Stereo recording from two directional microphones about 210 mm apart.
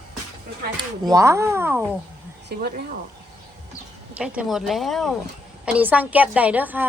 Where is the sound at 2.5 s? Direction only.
50° right (ahead or behind).